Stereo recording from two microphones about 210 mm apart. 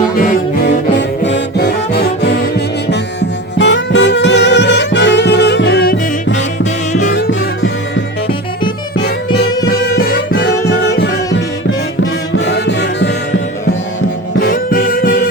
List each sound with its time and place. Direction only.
1.2 s music: 55° left (ahead or behind)
2.9 s saxophone: 55° left (ahead or behind)
7.1 s music: 55° left (ahead or behind)
9.6 s music: 50° left (ahead or behind)
12.5 s music: 55° left (ahead or behind)
14.3 s music: 45° left (ahead or behind)